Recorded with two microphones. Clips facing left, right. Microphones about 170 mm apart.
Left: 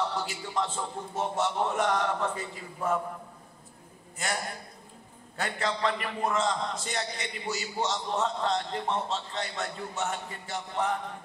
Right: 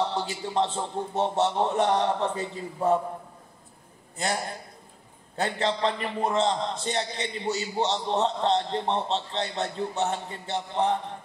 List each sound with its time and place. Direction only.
0.1 s a man's voice: 30° right (ahead or behind)
5.4 s a man's voice: 30° right (ahead or behind)